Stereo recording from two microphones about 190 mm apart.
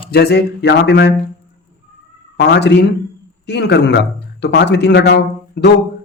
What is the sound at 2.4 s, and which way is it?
A man's voice, 60° left (ahead or behind).